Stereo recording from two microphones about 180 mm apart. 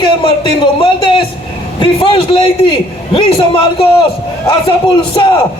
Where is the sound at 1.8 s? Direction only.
30° left (ahead or behind).